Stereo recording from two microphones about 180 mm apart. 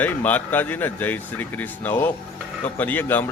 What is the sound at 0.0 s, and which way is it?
Speech, 10° left (ahead or behind).